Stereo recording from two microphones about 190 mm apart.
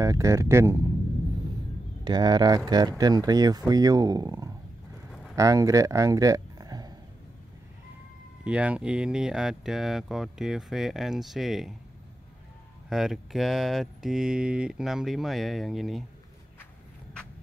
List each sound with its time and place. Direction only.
0.0 s speech: 15° right (ahead or behind)
2.0 s speech: 20° right (ahead or behind)
8.5 s speech: 5° right (ahead or behind)
12.9 s speech: centre (ahead or behind)